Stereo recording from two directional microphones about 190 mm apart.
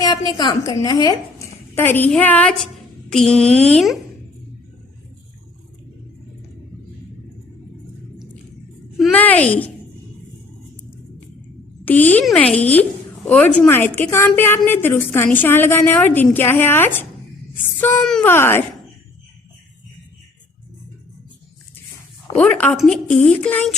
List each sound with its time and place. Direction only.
0.0 s a woman's voice: 20° left (ahead or behind); by 3.9 s centre (ahead or behind)
9.0 s a child's voice: 5° left (ahead or behind)
11.9 s a woman's voice: 10° left (ahead or behind)
22.4 s a woman's voice: 5° left (ahead or behind)